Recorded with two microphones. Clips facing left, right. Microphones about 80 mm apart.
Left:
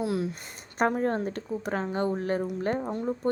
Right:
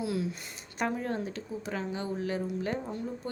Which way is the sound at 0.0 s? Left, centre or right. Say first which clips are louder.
Left 3 dB; left.